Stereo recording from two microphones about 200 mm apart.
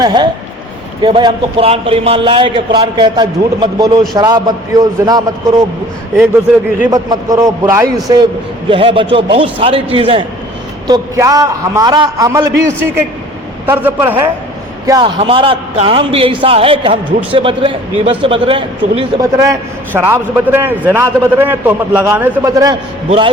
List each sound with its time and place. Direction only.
0.0 s a man's voice: 20° right (ahead or behind)
6.9 s a man's voice: 15° right (ahead or behind)
13.7 s a man's voice: 10° right (ahead or behind)
14.8 s a man's voice: 25° right (ahead or behind)
19.2 s a man's voice: 15° right (ahead or behind)